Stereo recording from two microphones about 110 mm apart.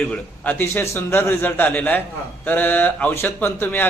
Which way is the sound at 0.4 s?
20° left (ahead or behind).